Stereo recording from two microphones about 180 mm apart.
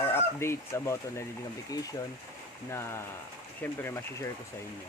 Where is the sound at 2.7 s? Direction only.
15° left (ahead or behind).